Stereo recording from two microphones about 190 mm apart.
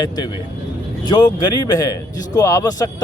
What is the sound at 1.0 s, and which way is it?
A man's voice, 20° left (ahead or behind).